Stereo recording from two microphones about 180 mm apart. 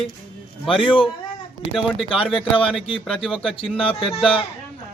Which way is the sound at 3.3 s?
Centre (ahead or behind).